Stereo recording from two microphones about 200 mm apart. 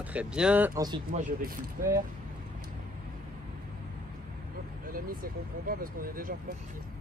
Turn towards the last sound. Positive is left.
turn(degrees=-45)  # may be behind; listen again after turning